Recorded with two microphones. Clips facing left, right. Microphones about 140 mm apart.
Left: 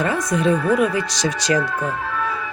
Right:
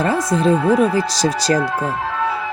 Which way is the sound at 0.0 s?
30° right (ahead or behind).